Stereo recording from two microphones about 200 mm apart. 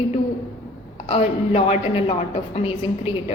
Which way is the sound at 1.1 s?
30° left (ahead or behind).